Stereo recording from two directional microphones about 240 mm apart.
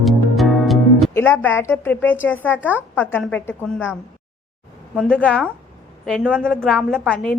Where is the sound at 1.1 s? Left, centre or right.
Centre.